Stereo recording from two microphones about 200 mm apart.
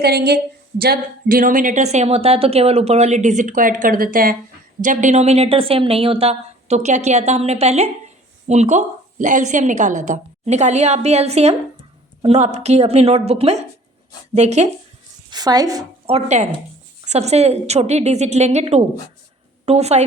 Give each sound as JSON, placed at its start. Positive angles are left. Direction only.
{"t": 0.0, "sound": "a woman's voice", "side_deg": -55}
{"t": 15.3, "sound": "a woman's voice", "side_deg": -20}
{"t": 16.1, "sound": "a woman's voice", "side_deg": -35}